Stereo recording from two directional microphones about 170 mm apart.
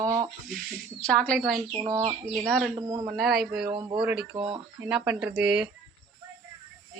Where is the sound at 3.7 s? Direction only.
25° right (ahead or behind).